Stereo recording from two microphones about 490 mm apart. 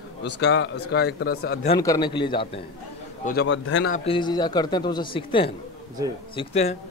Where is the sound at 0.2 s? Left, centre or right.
Left.